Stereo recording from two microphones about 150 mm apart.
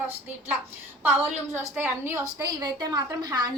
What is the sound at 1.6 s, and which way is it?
A woman's voice, 15° right (ahead or behind).